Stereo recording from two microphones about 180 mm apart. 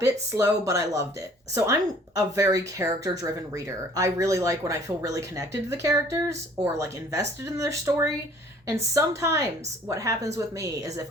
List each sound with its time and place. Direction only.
0.0 s speech: 15° right (ahead or behind)